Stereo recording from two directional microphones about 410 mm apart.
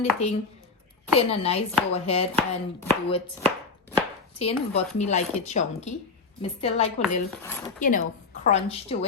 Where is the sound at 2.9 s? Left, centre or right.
Centre.